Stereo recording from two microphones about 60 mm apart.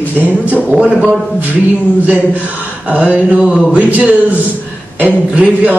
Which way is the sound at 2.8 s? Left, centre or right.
Right.